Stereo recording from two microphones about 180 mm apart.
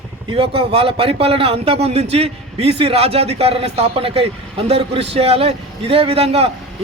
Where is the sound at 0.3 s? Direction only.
30° right (ahead or behind).